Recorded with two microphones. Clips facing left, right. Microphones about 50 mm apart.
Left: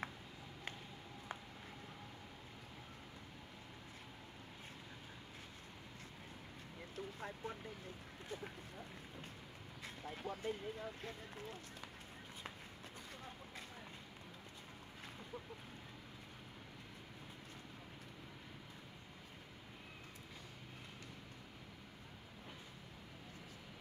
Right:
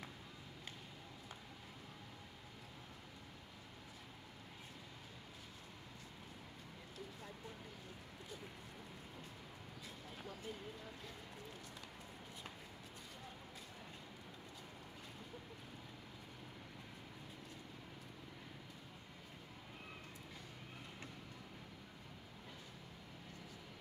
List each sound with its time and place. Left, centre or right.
7.2 s vehicle: left
9.8 s speech: left